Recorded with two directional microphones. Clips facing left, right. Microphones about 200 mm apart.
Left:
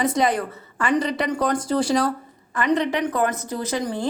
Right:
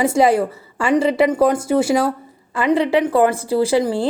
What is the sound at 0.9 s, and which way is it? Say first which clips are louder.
Speech: right 8 dB; 25° right (ahead or behind).